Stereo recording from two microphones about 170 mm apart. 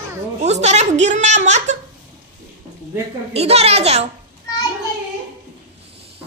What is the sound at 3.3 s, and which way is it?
Speech, 40° right (ahead or behind).